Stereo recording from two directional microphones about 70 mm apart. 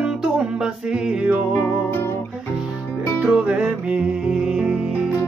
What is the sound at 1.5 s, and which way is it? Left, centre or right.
Music, left.